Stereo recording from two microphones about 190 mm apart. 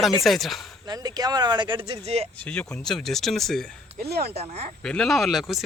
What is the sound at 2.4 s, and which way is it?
Speech, 5° left (ahead or behind).